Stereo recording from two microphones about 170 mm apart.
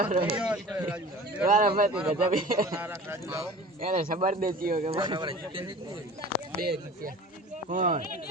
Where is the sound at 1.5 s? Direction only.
55° right (ahead or behind).